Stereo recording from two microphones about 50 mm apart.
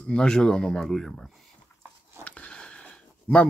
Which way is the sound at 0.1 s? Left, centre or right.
Centre.